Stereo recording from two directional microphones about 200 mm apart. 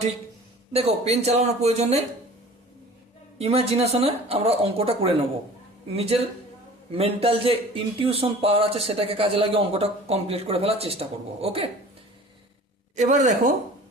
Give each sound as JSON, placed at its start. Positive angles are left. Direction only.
{"t": 0.7, "sound": "speech", "side_deg": -30}
{"t": 3.3, "sound": "speech", "side_deg": -30}
{"t": 6.9, "sound": "speech", "side_deg": -30}
{"t": 13.0, "sound": "speech", "side_deg": -35}